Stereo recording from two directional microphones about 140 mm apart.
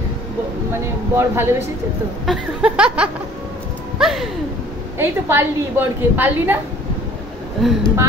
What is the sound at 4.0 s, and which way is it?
Music, 5° right (ahead or behind).